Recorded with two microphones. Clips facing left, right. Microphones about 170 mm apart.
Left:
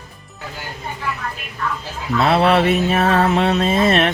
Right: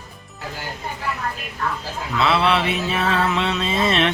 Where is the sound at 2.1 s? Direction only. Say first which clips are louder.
Left 4 dB; 45° left (ahead or behind).